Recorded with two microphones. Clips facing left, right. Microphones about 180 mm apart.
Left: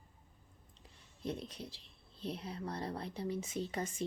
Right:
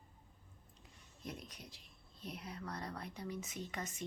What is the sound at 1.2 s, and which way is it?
Speech, 30° left (ahead or behind).